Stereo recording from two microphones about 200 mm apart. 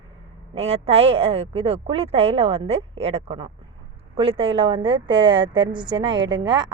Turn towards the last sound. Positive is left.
turn(degrees=-20)  # may be behind; listen again after turning